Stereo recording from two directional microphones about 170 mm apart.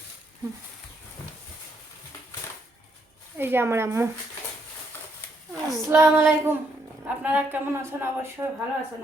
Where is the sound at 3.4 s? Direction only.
15° right (ahead or behind).